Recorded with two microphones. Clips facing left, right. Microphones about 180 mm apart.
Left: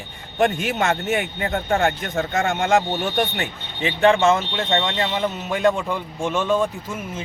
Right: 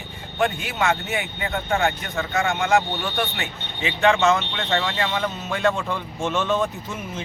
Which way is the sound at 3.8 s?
30° left (ahead or behind).